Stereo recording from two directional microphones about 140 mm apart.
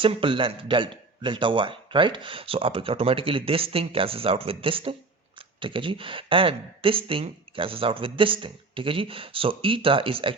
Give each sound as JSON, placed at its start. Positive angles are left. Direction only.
{"t": 0.0, "sound": "a man's voice", "side_deg": -40}